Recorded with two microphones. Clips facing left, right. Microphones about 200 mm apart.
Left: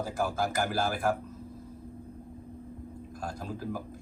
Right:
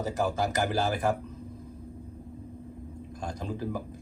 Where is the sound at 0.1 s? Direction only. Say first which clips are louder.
Right 4 dB; 10° left (ahead or behind).